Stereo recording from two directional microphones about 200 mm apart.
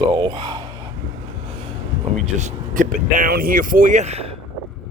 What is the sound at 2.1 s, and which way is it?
Speech, 35° right (ahead or behind).